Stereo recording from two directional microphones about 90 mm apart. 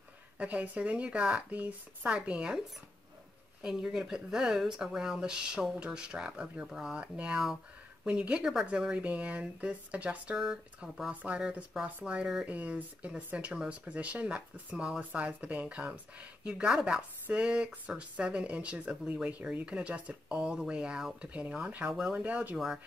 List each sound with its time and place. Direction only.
0.4 s speech: 15° right (ahead or behind)
3.6 s speech: 5° right (ahead or behind)